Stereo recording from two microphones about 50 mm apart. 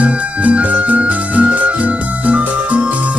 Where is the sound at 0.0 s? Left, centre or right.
Right.